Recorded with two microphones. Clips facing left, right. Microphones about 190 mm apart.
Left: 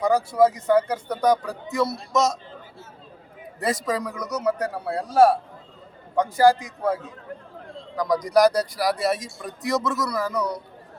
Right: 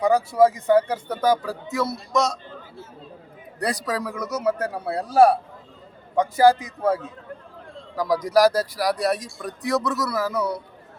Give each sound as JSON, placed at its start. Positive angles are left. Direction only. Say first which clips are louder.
{"t": 0.1, "sound": "speech", "louder": "right 1 dB", "side_deg": -10}
{"t": 3.6, "sound": "speech", "louder": "left 1 dB", "side_deg": 0}
{"t": 7.9, "sound": "speech", "louder": "even", "side_deg": -5}